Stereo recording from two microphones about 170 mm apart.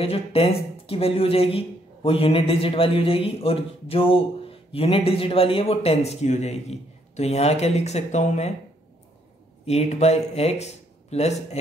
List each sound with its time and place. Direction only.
0.0 s a man's voice: 35° left (ahead or behind)
9.7 s a man's voice: 40° left (ahead or behind)